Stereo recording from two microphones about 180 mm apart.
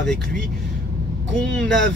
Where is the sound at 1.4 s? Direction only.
5° left (ahead or behind).